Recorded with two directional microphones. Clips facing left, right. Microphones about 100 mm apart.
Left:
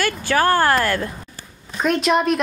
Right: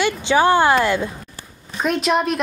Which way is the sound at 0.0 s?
20° right (ahead or behind).